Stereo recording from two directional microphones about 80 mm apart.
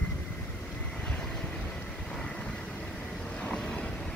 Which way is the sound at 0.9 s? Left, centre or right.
Centre.